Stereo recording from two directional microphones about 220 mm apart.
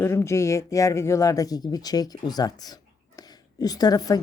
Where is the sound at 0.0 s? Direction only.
10° left (ahead or behind).